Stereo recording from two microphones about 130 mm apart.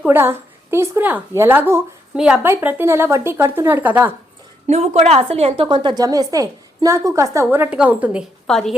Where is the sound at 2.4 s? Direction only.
15° right (ahead or behind).